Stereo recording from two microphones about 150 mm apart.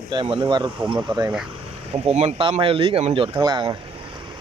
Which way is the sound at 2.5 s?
40° right (ahead or behind).